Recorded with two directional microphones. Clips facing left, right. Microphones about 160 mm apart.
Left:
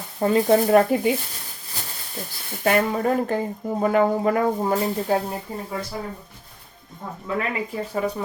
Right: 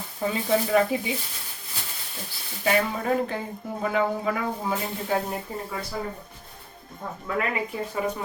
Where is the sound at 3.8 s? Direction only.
45° left (ahead or behind).